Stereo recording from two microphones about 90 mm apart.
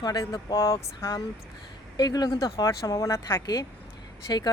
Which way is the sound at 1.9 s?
45° left (ahead or behind).